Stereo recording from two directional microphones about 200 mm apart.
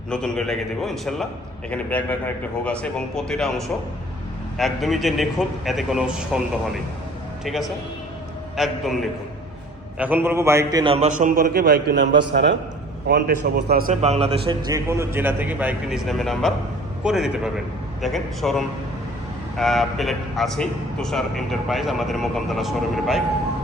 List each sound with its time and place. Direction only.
0.1 s a man's voice: 5° left (ahead or behind)
7.4 s a man's voice: centre (ahead or behind); by 10.9 s 20° right (ahead or behind)
10.9 s a man's voice: 35° right (ahead or behind)
14.0 s a man's voice: 35° right (ahead or behind)
14.8 s a man's voice: 15° right (ahead or behind)